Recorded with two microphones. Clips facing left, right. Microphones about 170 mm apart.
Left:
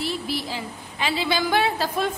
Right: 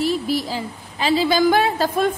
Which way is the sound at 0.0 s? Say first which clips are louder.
Right 7 dB; 40° right (ahead or behind).